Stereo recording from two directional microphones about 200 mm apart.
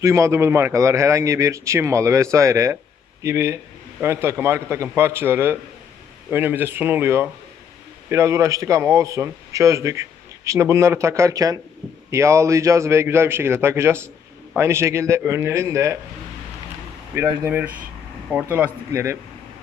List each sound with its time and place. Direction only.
0.0 s a man's voice: 15° right (ahead or behind)
17.2 s a man's voice: 10° right (ahead or behind)